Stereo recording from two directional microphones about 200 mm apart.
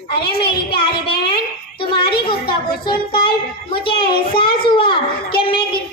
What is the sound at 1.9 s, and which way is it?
Speech, 25° left (ahead or behind).